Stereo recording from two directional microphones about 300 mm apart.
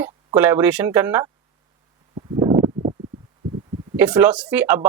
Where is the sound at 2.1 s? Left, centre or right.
Centre.